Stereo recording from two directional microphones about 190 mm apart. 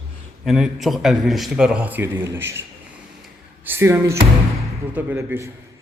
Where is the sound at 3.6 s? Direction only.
10° right (ahead or behind).